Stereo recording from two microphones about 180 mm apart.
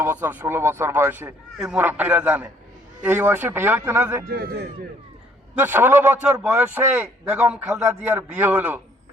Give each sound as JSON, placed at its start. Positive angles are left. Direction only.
{"t": 0.0, "sound": "a man's voice", "side_deg": -10}
{"t": 4.3, "sound": "speech", "side_deg": -60}
{"t": 5.5, "sound": "a man's voice", "side_deg": -10}